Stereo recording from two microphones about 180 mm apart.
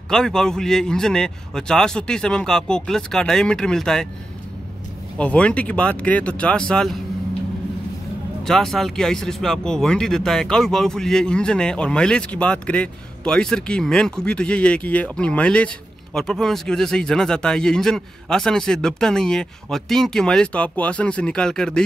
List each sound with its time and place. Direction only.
0.1 s speech: 5° left (ahead or behind)
5.1 s speech: 5° left (ahead or behind)
8.5 s speech: centre (ahead or behind)